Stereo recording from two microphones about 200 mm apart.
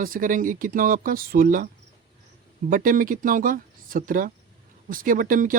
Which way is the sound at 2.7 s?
45° right (ahead or behind).